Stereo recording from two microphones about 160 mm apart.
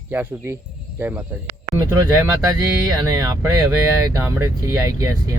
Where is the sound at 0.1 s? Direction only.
10° right (ahead or behind).